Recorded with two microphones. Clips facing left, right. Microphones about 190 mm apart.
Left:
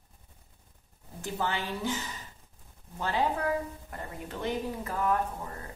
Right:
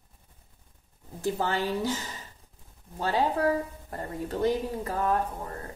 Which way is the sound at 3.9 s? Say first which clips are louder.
Right 6 dB; 40° right (ahead or behind).